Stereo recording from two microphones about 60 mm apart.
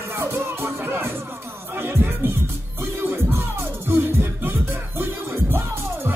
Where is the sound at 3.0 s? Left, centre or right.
Right.